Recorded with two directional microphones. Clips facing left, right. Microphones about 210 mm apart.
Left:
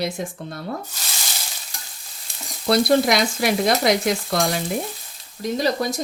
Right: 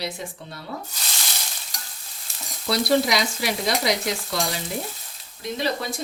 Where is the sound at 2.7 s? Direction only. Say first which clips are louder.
Left 4 dB; 50° left (ahead or behind).